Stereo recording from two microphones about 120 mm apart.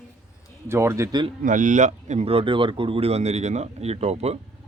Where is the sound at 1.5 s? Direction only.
90° right; by 4.4 s 60° right (ahead or behind).